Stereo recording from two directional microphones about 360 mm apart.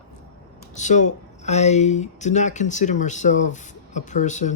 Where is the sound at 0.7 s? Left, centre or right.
Centre.